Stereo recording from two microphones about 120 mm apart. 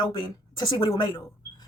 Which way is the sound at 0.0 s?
35° left (ahead or behind).